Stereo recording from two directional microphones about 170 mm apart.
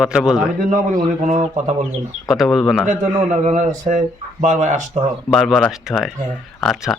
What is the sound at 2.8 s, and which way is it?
Speech, 45° right (ahead or behind).